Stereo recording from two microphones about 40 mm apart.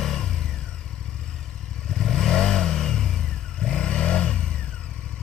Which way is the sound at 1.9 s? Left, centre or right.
Centre.